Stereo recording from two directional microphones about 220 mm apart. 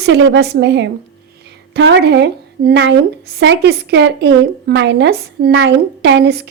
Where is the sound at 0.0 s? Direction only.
50° right (ahead or behind).